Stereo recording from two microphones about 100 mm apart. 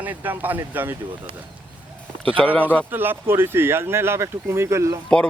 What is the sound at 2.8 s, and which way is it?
Speech, 20° right (ahead or behind).